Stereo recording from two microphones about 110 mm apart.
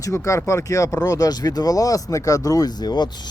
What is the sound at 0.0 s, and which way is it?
Speech, 25° left (ahead or behind).